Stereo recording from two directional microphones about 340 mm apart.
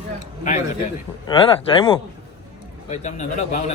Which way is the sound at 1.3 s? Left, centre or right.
Centre.